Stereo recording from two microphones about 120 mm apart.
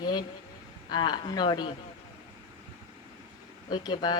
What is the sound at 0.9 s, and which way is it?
Speech, 35° left (ahead or behind).